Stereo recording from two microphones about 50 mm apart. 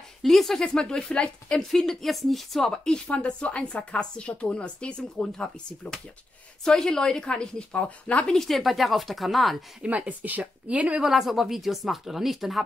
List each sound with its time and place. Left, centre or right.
0.2 s a woman's voice: centre
1.6 s speech: centre
2.7 s a woman's voice: centre
8.4 s speech: centre
9.8 s a woman's voice: right
11.1 s speech: centre